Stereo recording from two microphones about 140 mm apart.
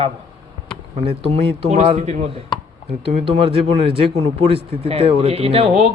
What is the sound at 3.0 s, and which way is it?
Speech, 40° right (ahead or behind).